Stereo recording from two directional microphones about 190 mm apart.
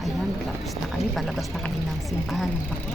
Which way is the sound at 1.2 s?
Centre (ahead or behind).